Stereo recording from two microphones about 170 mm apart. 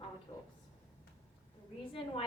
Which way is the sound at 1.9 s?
35° left (ahead or behind).